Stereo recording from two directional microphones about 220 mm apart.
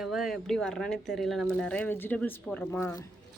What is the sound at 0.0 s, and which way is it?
Speech, centre (ahead or behind).